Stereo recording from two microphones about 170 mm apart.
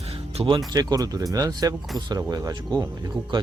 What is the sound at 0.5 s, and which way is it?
Speech, 20° right (ahead or behind).